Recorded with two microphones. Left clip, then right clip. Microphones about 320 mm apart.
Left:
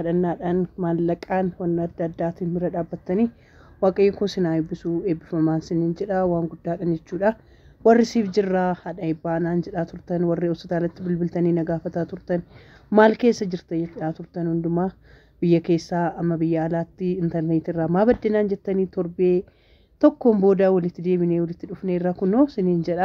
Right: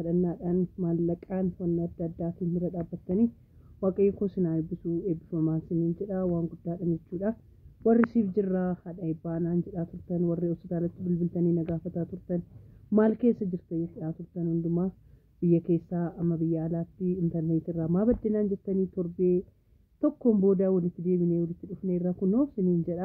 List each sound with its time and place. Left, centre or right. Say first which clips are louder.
0.0 s speech: left 7 dB; centre